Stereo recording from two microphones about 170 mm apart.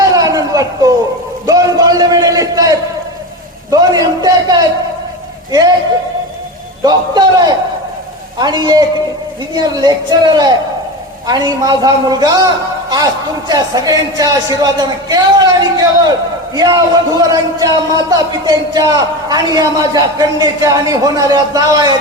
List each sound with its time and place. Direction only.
0.0 s a sound: 20° right (ahead or behind)
5.5 s a man's voice: 20° right (ahead or behind)
6.8 s a man's voice: 25° right (ahead or behind)
11.3 s a man's voice: 25° right (ahead or behind)
13.5 s a man's voice: 20° right (ahead or behind)